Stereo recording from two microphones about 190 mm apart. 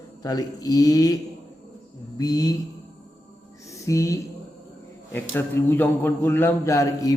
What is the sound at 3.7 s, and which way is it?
Music, 15° left (ahead or behind).